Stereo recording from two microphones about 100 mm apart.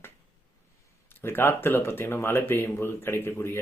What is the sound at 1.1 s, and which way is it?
Speech, 20° left (ahead or behind).